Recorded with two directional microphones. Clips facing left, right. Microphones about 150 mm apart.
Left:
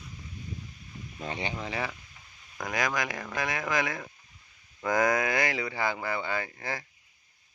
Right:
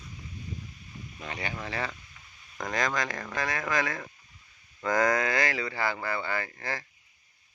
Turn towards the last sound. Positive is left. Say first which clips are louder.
# even
turn(degrees=15)  # may be behind; listen again after turning